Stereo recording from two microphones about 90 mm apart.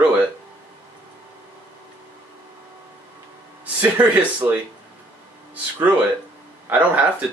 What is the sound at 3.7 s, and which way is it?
Speech, 15° right (ahead or behind).